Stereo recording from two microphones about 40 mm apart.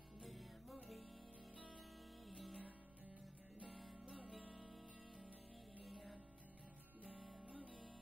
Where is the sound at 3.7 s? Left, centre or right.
Centre.